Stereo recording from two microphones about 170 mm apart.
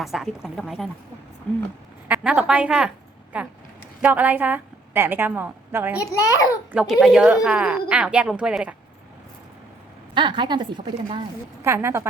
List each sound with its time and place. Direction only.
0.0 s speech: centre (ahead or behind)
2.0 s a woman's voice: 5° right (ahead or behind)
6.0 s a child's voice: 20° left (ahead or behind)
6.7 s speech: 5° right (ahead or behind)
10.2 s speech: 30° right (ahead or behind)
11.6 s a woman's voice: 15° right (ahead or behind)